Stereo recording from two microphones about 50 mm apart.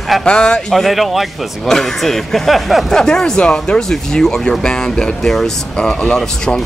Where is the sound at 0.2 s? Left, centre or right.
Centre.